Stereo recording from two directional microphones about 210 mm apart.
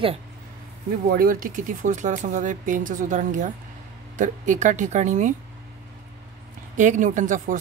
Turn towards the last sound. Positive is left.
turn(degrees=-40)  # may be behind; listen again after turning